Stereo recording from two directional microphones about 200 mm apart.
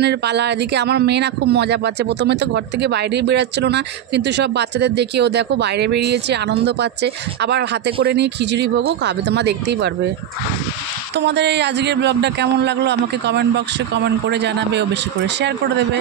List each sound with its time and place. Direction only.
0.0 s speech: 55° right (ahead or behind)
11.1 s speech: 60° right (ahead or behind)